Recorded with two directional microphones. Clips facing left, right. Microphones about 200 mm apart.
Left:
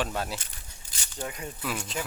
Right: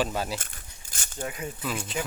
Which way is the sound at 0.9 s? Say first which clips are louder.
Right 1 dB; 50° right (ahead or behind).